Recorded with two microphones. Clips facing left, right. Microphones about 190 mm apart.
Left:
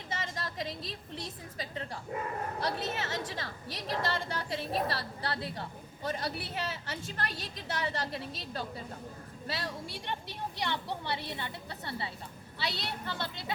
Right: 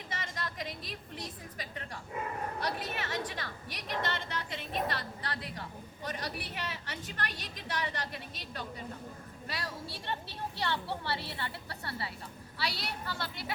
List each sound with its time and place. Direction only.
0.1 s a sound: 25° left (ahead or behind)
1.5 s a woman's voice: 30° left (ahead or behind)
9.9 s a woman's voice: 15° left (ahead or behind)